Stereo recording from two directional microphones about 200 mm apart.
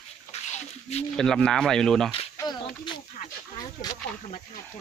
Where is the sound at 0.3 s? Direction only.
30° left (ahead or behind).